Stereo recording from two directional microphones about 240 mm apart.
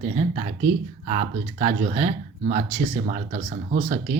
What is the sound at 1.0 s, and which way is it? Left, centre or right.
Speech, right.